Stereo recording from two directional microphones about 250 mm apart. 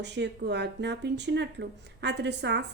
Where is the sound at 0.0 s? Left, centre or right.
Right.